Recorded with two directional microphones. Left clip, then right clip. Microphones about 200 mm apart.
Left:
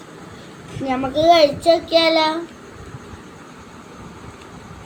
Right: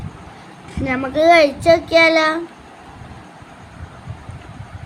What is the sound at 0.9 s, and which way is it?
A child's voice, 45° right (ahead or behind).